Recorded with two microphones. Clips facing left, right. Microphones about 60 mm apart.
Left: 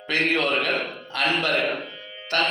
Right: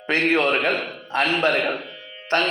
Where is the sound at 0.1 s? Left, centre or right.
Right.